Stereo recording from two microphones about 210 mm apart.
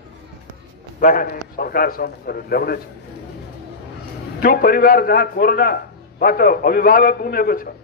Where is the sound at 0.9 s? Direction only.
40° left (ahead or behind).